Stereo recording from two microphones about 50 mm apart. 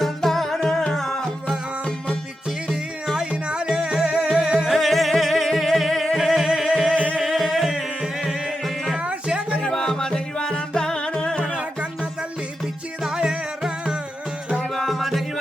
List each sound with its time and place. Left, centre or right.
0.0 s music: centre
3.2 s music: centre
4.6 s music: centre
6.9 s music: left
7.2 s music: centre
8.4 s music: centre
9.0 s music: right
9.6 s music: centre
13.1 s music: centre
14.6 s music: centre